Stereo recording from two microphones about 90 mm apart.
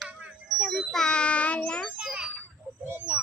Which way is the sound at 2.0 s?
10° right (ahead or behind).